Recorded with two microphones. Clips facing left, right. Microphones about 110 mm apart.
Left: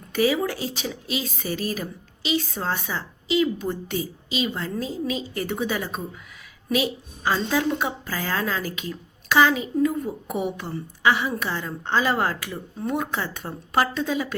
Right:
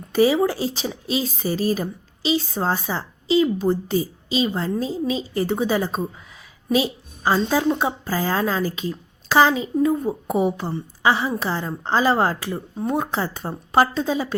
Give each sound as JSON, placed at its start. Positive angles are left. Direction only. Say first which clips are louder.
{"t": 0.1, "sound": "a woman's voice", "louder": "right 5 dB", "side_deg": -30}